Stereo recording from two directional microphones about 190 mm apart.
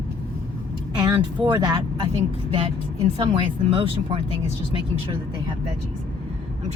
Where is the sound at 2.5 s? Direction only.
30° right (ahead or behind).